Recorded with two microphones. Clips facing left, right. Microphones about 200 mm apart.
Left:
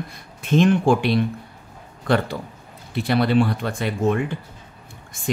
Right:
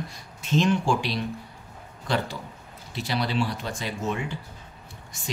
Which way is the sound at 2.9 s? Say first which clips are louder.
Left 9 dB; 55° left (ahead or behind).